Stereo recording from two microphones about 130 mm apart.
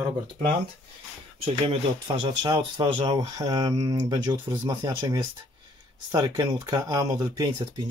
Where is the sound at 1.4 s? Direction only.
40° right (ahead or behind).